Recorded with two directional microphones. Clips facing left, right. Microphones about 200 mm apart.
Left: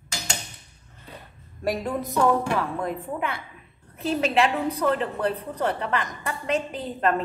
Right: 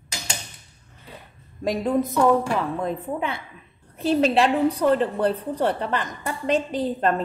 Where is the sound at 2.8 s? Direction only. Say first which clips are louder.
Right 2 dB; 25° right (ahead or behind).